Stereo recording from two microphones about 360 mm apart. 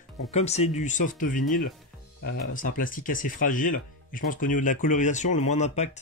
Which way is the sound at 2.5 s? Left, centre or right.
Left.